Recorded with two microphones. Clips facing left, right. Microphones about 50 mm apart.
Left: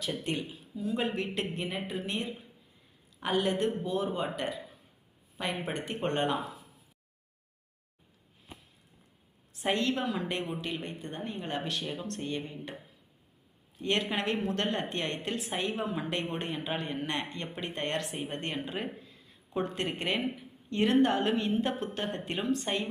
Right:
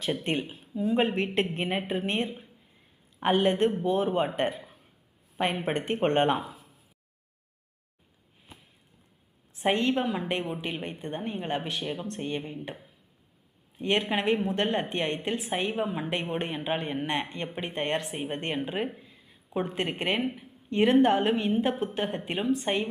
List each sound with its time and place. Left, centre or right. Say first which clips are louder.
0.0 s speech: right 4 dB; right
5.6 s speech: right 7 dB; right
6.4 s a sound: left 1 dB; centre
9.5 s a woman's voice: right 4 dB; right
13.7 s a woman's voice: right 4 dB; right
18.9 s a sound: even; centre
20.3 s a woman's voice: right 5 dB; centre